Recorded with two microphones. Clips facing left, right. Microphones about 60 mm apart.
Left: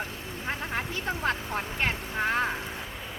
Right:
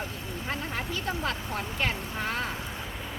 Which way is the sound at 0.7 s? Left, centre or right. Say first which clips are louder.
Left 1 dB; left.